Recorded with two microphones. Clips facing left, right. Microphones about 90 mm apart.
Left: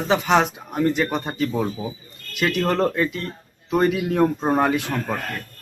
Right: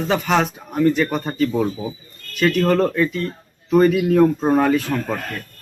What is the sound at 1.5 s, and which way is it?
Speech, 5° left (ahead or behind).